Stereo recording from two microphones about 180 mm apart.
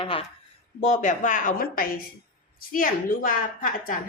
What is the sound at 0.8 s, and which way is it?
A woman's voice, 45° left (ahead or behind).